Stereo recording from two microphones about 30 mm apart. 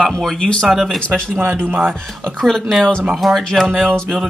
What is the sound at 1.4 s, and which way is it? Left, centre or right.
Speech, right.